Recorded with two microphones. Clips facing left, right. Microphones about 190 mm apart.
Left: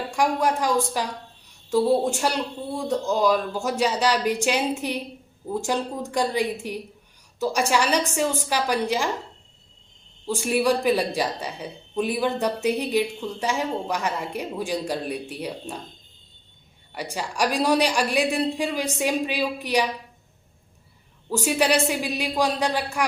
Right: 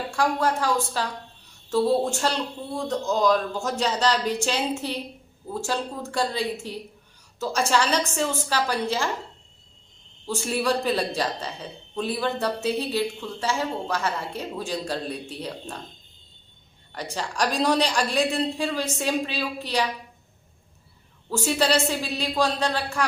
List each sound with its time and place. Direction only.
0.1 s a man's voice: 15° left (ahead or behind)
10.2 s a man's voice: 10° left (ahead or behind)
16.9 s a man's voice: 10° left (ahead or behind)
21.2 s a man's voice: 15° left (ahead or behind)